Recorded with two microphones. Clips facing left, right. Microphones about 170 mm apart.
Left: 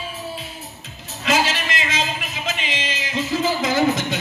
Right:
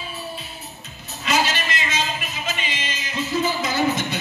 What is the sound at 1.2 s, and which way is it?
Music, 90° left.